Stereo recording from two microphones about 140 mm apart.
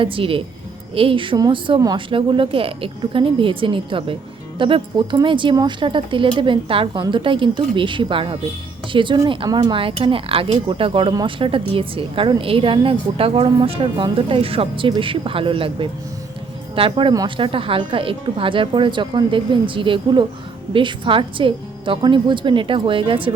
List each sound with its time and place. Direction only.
0.0 s speech: 40° right (ahead or behind)